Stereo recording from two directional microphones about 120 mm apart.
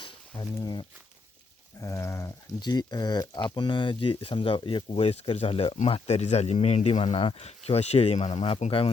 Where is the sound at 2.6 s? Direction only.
35° left (ahead or behind); by 5.7 s 55° left (ahead or behind).